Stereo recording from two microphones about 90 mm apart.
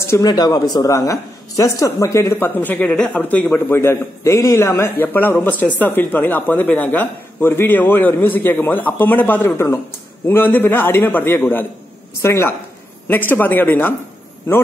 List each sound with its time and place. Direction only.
0.2 s speech: 50° left (ahead or behind); by 13.9 s 20° left (ahead or behind)